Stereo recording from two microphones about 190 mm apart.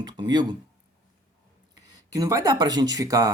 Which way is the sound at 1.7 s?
15° right (ahead or behind).